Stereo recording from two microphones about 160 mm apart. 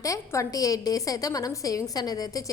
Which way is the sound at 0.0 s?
20° left (ahead or behind).